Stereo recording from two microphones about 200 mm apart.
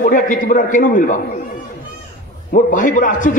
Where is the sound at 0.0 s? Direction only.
40° left (ahead or behind).